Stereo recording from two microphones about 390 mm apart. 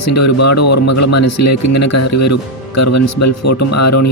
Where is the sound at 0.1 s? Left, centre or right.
Left.